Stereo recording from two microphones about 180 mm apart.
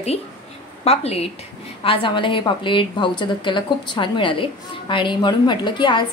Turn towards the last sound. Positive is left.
turn(degrees=25)  # may be behind; listen again after turning